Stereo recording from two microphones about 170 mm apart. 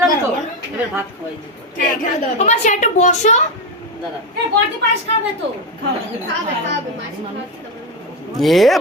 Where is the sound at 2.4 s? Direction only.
45° left (ahead or behind).